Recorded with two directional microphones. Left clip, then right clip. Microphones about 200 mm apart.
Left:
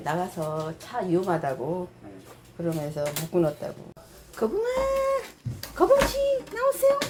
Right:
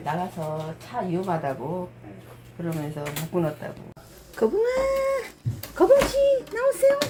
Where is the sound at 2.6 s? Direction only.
15° left (ahead or behind).